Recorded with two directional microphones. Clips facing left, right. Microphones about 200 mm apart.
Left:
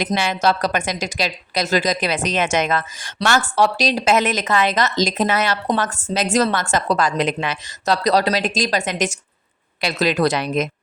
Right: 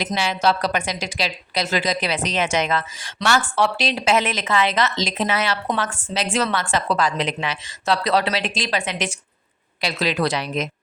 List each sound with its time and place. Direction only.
0.1 s a woman's voice: 50° left (ahead or behind)